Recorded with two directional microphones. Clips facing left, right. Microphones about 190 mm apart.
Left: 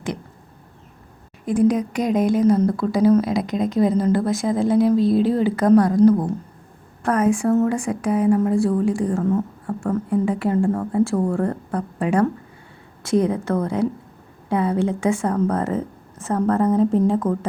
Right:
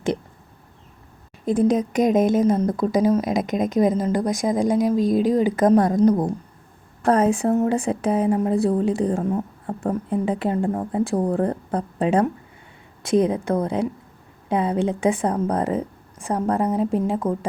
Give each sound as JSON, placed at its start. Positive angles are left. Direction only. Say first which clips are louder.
{"t": 1.5, "sound": "a woman's voice", "louder": "left 1 dB", "side_deg": -25}
{"t": 7.0, "sound": "a woman's voice", "louder": "right 1 dB", "side_deg": -30}